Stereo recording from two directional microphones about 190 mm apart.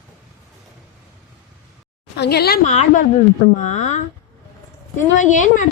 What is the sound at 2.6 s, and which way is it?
A woman's voice, 40° left (ahead or behind).